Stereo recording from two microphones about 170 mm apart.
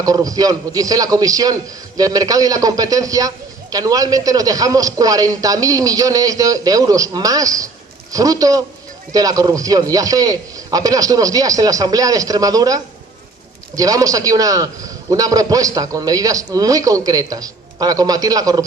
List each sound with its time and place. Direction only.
0.0 s a man's voice: 20° right (ahead or behind)